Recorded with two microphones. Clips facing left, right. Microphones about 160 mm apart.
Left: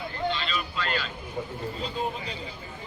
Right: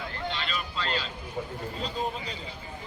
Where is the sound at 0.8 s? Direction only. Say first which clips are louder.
Left 1 dB; 30° right (ahead or behind).